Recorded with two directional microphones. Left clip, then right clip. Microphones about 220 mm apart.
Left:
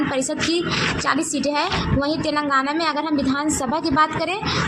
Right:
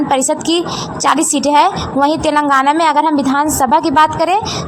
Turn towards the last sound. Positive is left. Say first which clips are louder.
# right 9 dB
turn(degrees=-40)  # may be behind; listen again after turning